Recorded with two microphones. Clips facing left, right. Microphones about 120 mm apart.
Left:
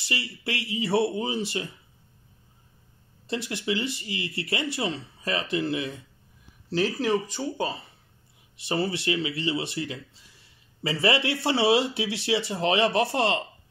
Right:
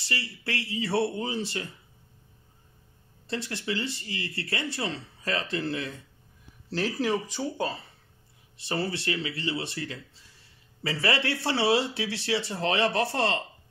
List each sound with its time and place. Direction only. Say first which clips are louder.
0.0 s speech: left 2 dB; 15° left (ahead or behind)
3.3 s speech: left 3 dB; 15° left (ahead or behind)
6.7 s speech: left 3 dB; centre (ahead or behind)
8.5 s speech: left 3 dB; 15° left (ahead or behind)